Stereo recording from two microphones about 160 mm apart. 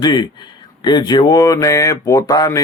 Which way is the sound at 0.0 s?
25° left (ahead or behind).